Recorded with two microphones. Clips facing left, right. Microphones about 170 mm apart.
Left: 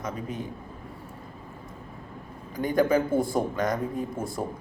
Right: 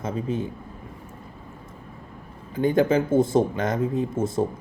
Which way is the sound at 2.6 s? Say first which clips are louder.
Right 3 dB; 25° right (ahead or behind).